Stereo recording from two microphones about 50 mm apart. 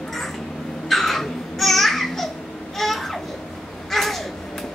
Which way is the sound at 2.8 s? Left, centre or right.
Centre.